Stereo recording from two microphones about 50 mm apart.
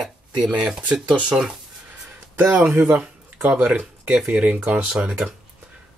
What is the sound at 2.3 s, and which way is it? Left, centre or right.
Speech, right.